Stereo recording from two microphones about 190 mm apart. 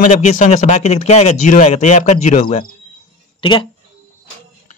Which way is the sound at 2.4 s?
25° left (ahead or behind).